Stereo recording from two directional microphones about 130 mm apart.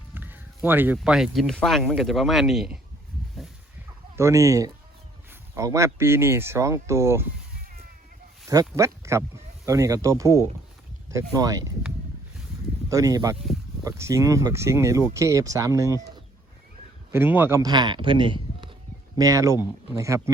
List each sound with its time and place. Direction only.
0.1 s a sound: 15° right (ahead or behind)
0.9 s speech: 5° right (ahead or behind)
4.1 s speech: 20° right (ahead or behind)
8.4 s speech: 25° right (ahead or behind)
12.9 s speech: 25° right (ahead or behind)
17.1 s a man's voice: 15° right (ahead or behind)
17.6 s speech: 35° right (ahead or behind)
19.1 s speech: 25° right (ahead or behind)